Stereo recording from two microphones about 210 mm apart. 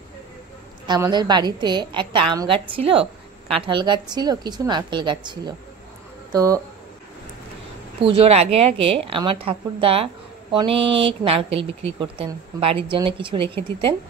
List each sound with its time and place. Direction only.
0.8 s a woman's voice: 20° right (ahead or behind)
8.0 s a woman's voice: 25° right (ahead or behind)
10.9 s speech: 60° right (ahead or behind)
11.2 s a woman's voice: 25° right (ahead or behind)